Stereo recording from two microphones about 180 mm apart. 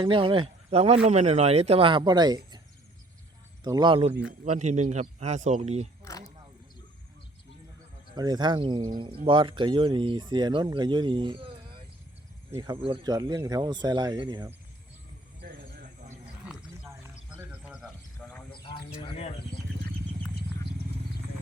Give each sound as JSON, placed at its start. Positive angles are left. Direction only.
{"t": 0.0, "sound": "speech", "side_deg": -30}
{"t": 3.6, "sound": "speech", "side_deg": -25}
{"t": 4.4, "sound": "speech", "side_deg": -40}
{"t": 8.1, "sound": "speech", "side_deg": -25}
{"t": 15.4, "sound": "a sound", "side_deg": -70}
{"t": 17.3, "sound": "music", "side_deg": -5}
{"t": 18.9, "sound": "a sound", "side_deg": 35}